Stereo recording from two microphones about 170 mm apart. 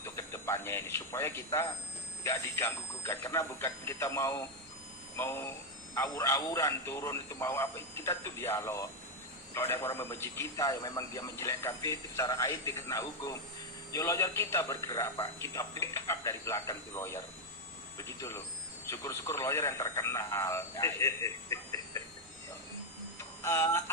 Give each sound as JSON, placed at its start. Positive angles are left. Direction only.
{"t": 0.0, "sound": "a man's voice", "side_deg": 15}
{"t": 23.4, "sound": "clock", "side_deg": 15}